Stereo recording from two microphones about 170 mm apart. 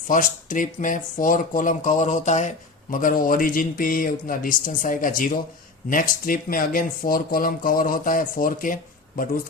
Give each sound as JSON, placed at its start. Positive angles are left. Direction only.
{"t": 0.1, "sound": "a man's voice", "side_deg": 50}